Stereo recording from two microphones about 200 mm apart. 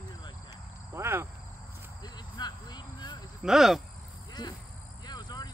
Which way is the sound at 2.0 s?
20° left (ahead or behind).